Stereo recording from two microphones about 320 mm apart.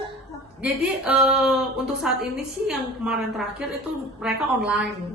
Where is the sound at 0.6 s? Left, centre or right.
Centre.